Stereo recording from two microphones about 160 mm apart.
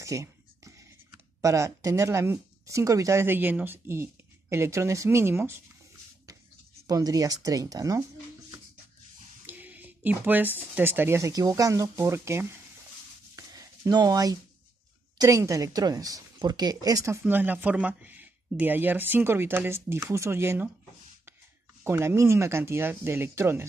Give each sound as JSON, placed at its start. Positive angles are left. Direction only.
{"t": 0.0, "sound": "speech", "side_deg": -20}
{"t": 6.9, "sound": "speech", "side_deg": -25}
{"t": 9.5, "sound": "speech", "side_deg": -10}
{"t": 13.4, "sound": "a sound", "side_deg": -20}
{"t": 15.1, "sound": "speech", "side_deg": -20}
{"t": 21.8, "sound": "speech", "side_deg": -15}